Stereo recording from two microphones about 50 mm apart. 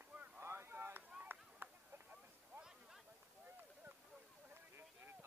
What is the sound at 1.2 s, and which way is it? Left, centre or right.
Chop, right.